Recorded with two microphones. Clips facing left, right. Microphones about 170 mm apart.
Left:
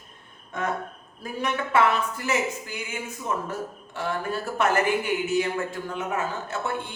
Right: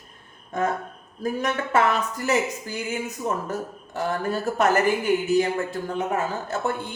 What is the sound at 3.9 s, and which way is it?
Speech, 40° right (ahead or behind).